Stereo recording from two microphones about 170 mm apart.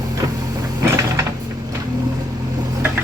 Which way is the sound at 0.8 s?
15° right (ahead or behind).